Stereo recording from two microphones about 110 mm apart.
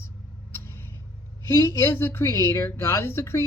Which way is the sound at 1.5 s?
25° left (ahead or behind).